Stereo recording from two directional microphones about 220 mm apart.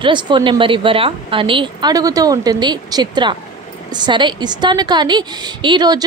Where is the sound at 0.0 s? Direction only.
20° right (ahead or behind).